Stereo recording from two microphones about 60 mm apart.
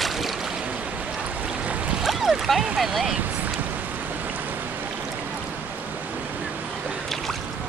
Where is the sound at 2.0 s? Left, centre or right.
Centre.